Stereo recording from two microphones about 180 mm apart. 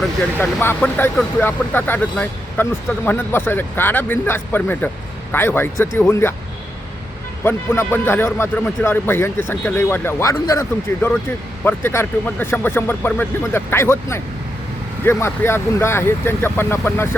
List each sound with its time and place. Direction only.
0.0 s speech: 10° left (ahead or behind)
7.4 s speech: 15° left (ahead or behind)